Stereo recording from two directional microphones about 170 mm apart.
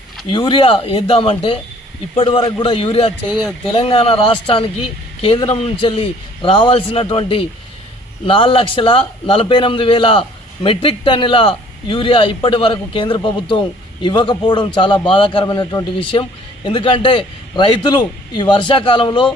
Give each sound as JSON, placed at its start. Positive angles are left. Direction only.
{"t": 0.3, "sound": "a man's voice", "side_deg": 30}
{"t": 3.3, "sound": "speech", "side_deg": 5}
{"t": 3.8, "sound": "a man's voice", "side_deg": 35}